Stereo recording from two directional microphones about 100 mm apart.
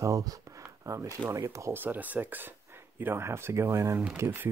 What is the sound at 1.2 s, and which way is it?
Speech, 30° right (ahead or behind).